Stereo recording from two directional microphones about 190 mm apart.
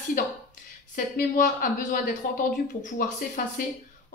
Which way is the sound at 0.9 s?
45° left (ahead or behind).